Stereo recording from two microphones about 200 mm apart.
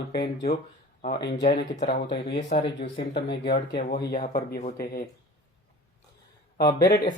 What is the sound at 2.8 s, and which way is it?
Speech, 55° left (ahead or behind).